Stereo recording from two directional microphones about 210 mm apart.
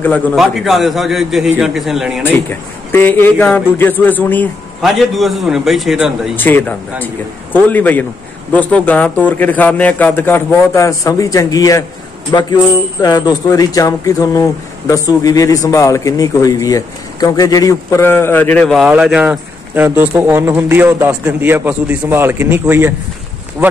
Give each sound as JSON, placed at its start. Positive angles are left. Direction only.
{"t": 0.0, "sound": "a man's voice", "side_deg": 10}
{"t": 2.2, "sound": "speech", "side_deg": 10}
{"t": 6.3, "sound": "speech", "side_deg": 10}